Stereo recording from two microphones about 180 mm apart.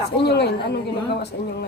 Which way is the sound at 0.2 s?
65° left (ahead or behind).